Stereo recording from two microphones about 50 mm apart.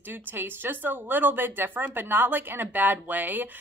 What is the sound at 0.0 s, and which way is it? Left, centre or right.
A woman's voice, right.